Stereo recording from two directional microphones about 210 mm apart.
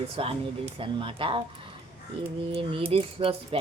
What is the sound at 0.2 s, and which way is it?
Speech, 25° right (ahead or behind).